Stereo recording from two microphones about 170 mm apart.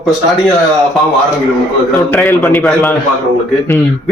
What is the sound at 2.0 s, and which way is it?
Speech, 10° left (ahead or behind).